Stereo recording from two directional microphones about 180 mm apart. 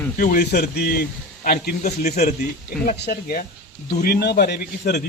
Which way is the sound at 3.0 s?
60° left (ahead or behind).